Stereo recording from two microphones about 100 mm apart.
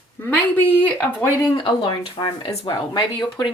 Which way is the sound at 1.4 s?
55° left (ahead or behind).